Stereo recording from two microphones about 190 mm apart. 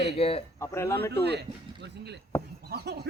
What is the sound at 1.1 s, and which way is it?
Speech, 60° right (ahead or behind).